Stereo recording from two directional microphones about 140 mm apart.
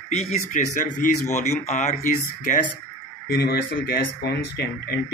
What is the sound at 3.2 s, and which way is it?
Speech, 90° left.